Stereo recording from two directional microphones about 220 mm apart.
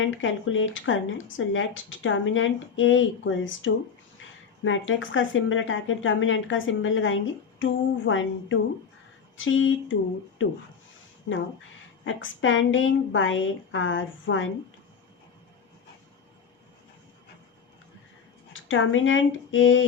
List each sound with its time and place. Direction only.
0.0 s speech: 60° left (ahead or behind)
12.0 s speech: 60° left (ahead or behind)
18.5 s speech: 60° left (ahead or behind)